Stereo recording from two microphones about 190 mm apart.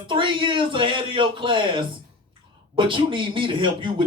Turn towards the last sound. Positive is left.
turn(degrees=-25)  # may be behind; listen again after turning